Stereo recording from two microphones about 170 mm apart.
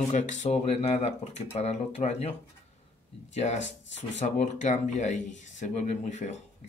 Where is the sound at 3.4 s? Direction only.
45° left (ahead or behind).